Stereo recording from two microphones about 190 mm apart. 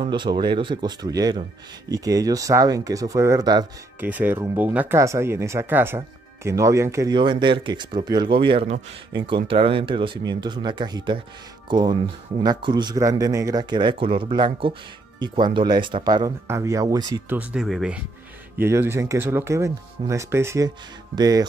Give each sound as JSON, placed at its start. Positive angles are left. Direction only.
{"t": 0.0, "sound": "speech", "side_deg": -25}
{"t": 4.0, "sound": "speech", "side_deg": -10}
{"t": 17.4, "sound": "speech", "side_deg": -5}